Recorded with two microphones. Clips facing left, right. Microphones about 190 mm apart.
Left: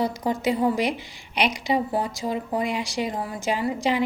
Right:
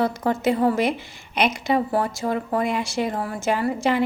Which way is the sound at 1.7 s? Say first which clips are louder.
Right 3 dB; 55° right (ahead or behind).